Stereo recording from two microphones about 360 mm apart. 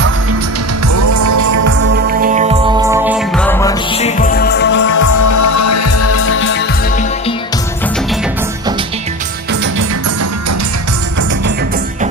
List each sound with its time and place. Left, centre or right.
0.9 s music: right
1.8 s music: right; by 4.9 s left
4.9 s music: left